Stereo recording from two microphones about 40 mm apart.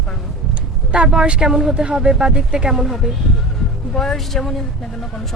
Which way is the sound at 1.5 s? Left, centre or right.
Centre.